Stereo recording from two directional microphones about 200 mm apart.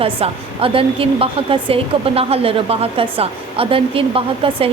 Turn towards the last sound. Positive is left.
turn(degrees=-25)  # may be behind; listen again after turning